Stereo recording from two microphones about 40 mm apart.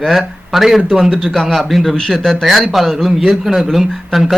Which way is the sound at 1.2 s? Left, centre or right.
Centre.